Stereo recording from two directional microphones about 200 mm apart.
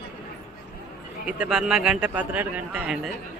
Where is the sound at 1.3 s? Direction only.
5° right (ahead or behind).